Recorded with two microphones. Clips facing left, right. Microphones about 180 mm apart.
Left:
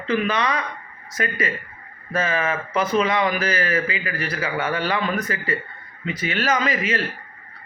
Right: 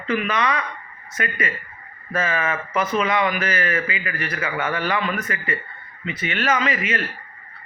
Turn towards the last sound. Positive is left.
turn(degrees=35)  # may be behind; listen again after turning